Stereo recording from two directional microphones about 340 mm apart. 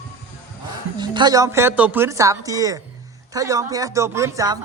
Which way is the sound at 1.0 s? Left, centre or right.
Centre.